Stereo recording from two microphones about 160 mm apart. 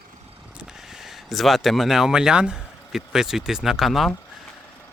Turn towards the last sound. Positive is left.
turn(degrees=0)  # may be behind; listen again after turning